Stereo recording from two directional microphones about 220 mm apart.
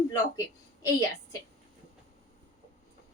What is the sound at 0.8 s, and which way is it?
Speech, 15° left (ahead or behind).